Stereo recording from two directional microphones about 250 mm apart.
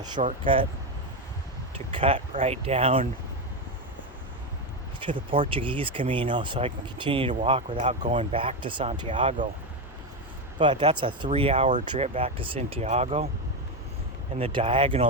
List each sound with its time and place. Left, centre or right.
0.2 s speech: right
1.9 s speech: right
4.9 s speech: centre
10.6 s speech: centre
14.3 s speech: right